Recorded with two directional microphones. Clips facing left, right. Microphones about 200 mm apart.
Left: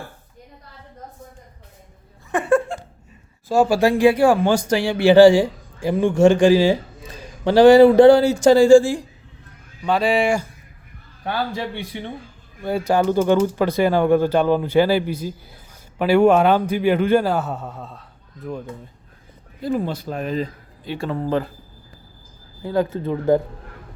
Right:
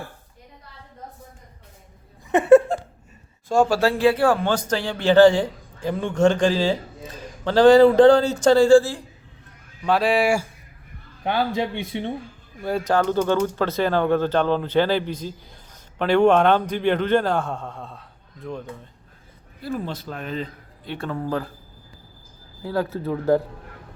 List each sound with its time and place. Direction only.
2.3 s a man's voice: 20° right (ahead or behind)
2.7 s a sound: 40° right (ahead or behind)
3.5 s speech: 10° left (ahead or behind)
9.8 s speech: centre (ahead or behind)
11.2 s a man's voice: 20° right (ahead or behind)
12.6 s speech: 5° left (ahead or behind)
19.6 s speech: 15° left (ahead or behind)
20.1 s speech: 40° left (ahead or behind)
20.8 s speech: 5° left (ahead or behind)
22.6 s speech: centre (ahead or behind)